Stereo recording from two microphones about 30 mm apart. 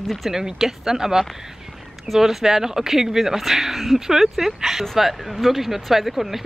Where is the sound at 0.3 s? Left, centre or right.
Centre.